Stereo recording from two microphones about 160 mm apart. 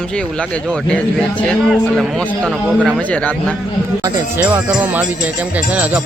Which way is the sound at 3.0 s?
10° left (ahead or behind).